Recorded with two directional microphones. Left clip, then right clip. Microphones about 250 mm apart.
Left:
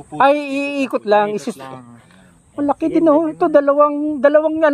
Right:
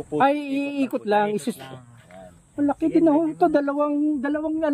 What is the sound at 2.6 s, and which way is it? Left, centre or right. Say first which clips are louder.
Speech: left 4 dB; centre.